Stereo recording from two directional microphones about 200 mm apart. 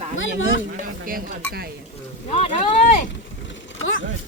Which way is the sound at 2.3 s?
30° left (ahead or behind).